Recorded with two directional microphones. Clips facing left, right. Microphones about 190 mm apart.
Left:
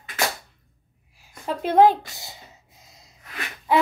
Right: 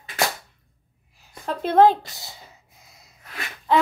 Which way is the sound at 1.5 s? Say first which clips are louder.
Even; 10° left (ahead or behind).